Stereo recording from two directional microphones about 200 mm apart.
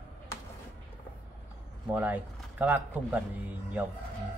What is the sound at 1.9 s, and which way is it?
Speech, 10° right (ahead or behind).